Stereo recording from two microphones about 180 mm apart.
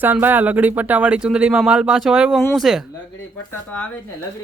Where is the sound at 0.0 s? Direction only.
10° right (ahead or behind); by 3.8 s 10° left (ahead or behind).